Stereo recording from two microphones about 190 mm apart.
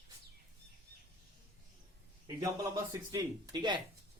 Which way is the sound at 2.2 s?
20° right (ahead or behind).